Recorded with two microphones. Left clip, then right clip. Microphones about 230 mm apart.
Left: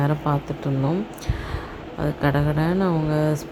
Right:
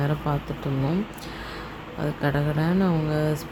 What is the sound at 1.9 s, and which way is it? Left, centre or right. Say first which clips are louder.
Speech: left 3 dB; centre.